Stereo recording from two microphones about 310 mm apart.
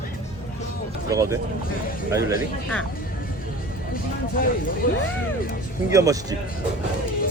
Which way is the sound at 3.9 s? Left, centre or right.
Left.